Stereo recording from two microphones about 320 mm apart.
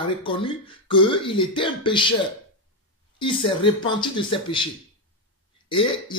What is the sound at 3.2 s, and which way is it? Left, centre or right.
Speech, centre.